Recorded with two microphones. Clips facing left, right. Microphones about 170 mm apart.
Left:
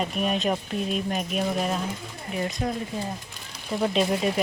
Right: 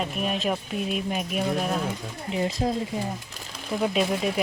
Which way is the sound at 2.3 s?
25° right (ahead or behind).